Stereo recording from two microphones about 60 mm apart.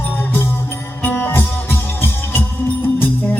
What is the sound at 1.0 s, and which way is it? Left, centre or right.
Music, left.